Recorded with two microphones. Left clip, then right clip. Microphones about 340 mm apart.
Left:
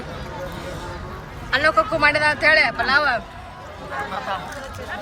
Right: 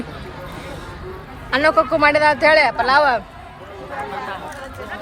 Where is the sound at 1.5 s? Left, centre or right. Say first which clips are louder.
Right 3 dB; centre.